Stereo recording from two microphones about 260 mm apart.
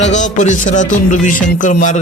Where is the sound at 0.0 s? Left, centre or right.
Left.